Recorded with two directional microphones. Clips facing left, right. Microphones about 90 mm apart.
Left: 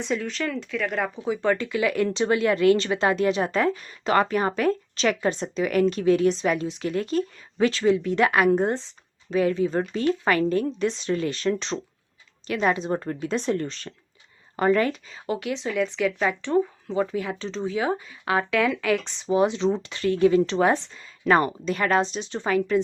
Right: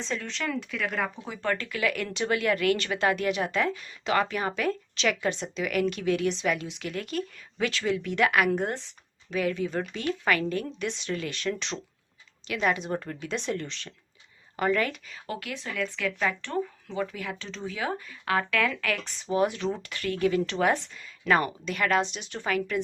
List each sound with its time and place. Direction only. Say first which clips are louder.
0.0 s speech: left 5 dB; 5° left (ahead or behind)
1.2 s speech: left 7 dB; 15° left (ahead or behind)
16.9 s speech: left 7 dB; 30° left (ahead or behind)